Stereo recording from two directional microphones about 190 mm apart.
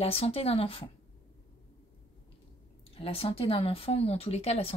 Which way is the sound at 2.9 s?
30° left (ahead or behind).